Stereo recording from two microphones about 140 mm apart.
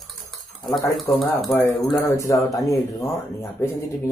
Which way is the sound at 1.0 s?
Centre (ahead or behind).